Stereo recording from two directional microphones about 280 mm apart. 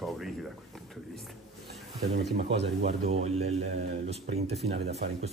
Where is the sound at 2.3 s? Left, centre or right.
Right.